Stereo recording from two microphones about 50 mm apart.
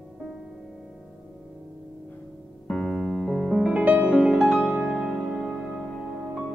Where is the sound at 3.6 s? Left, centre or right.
Centre.